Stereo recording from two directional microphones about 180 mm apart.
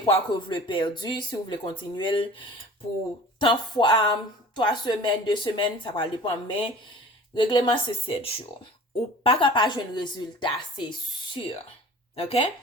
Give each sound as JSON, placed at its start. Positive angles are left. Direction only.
{"t": 0.0, "sound": "a woman's voice", "side_deg": 25}
{"t": 12.1, "sound": "speech", "side_deg": 35}